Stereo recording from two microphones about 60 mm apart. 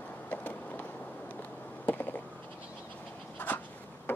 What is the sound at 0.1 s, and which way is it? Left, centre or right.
Vehicle, left.